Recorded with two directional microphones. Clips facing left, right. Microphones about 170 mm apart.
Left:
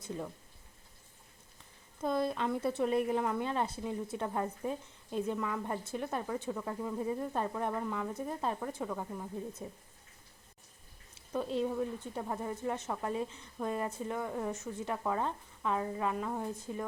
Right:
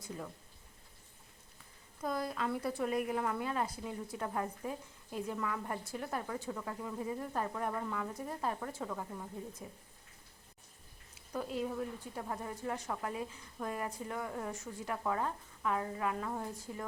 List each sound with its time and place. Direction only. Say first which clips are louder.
2.0 s a woman's voice: left 4 dB; 25° left (ahead or behind)
7.5 s a woman's voice: left 2 dB; 15° left (ahead or behind)
9.6 s a woman's voice: left 4 dB; 30° left (ahead or behind)
11.3 s a woman's voice: left 4 dB; 25° left (ahead or behind)